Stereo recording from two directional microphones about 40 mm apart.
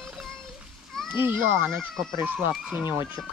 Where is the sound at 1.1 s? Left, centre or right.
Right.